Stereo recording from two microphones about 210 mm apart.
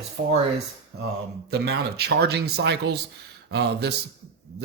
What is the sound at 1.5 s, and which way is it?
Speech, 50° right (ahead or behind).